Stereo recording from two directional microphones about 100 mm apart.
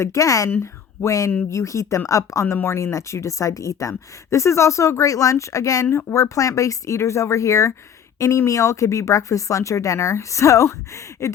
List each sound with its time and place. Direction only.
0.0 s speech: 35° left (ahead or behind)
0.5 s a sound: 30° left (ahead or behind)
1.5 s speech: 30° left (ahead or behind)